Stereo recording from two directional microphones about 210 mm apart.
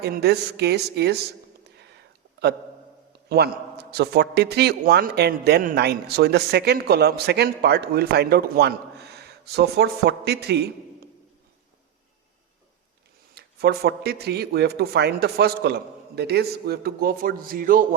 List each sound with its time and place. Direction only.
0.0 s a man's voice: 50° right (ahead or behind)
3.2 s a man's voice: 50° right (ahead or behind)
13.3 s a man's voice: 50° right (ahead or behind)